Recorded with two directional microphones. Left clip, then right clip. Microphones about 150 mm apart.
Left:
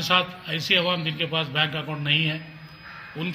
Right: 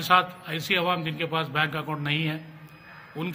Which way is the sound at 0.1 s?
15° right (ahead or behind).